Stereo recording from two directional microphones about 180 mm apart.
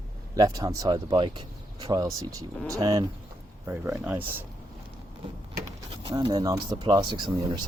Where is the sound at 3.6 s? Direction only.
10° right (ahead or behind).